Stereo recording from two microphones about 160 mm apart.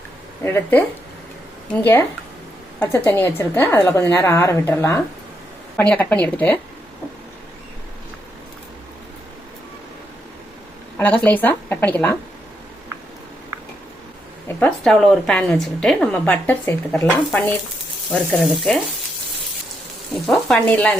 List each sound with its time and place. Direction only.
0.4 s a woman's voice: 10° left (ahead or behind)
10.9 s a woman's voice: 10° left (ahead or behind)
14.8 s a woman's voice: centre (ahead or behind)
20.2 s speech: 5° left (ahead or behind)